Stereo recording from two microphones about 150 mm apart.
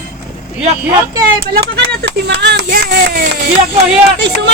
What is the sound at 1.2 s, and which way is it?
Speech, 85° right.